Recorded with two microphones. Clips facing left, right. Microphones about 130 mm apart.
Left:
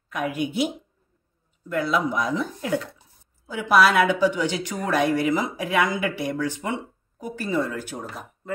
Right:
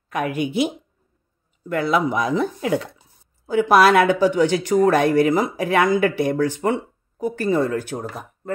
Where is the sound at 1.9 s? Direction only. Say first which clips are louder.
Right 5 dB; 70° right (ahead or behind).